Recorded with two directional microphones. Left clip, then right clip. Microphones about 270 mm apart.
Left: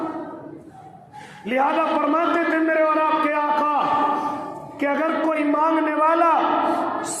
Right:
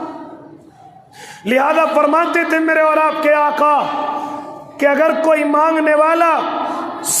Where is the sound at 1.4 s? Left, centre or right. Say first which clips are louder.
Right 6 dB; right.